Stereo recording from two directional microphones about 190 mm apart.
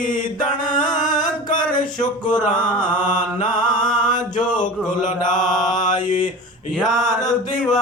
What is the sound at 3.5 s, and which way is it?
Music, 20° left (ahead or behind).